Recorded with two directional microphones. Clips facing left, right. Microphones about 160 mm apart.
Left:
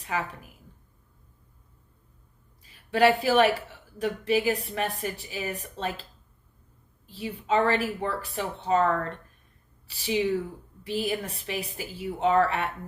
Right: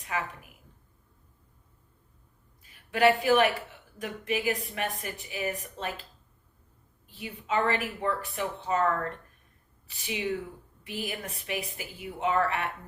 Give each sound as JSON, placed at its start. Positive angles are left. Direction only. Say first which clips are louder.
{"t": 2.9, "sound": "speech", "louder": "left 1 dB", "side_deg": 35}
{"t": 7.1, "sound": "speech", "louder": "left 5 dB", "side_deg": 30}